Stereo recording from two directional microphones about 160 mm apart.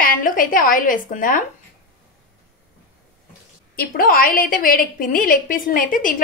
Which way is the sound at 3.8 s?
60° left (ahead or behind).